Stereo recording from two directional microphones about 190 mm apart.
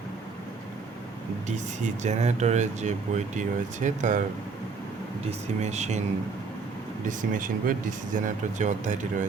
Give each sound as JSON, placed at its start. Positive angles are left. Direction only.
{"t": 1.5, "sound": "speech", "side_deg": -40}
{"t": 5.6, "sound": "speech", "side_deg": -35}
{"t": 7.0, "sound": "speech", "side_deg": -45}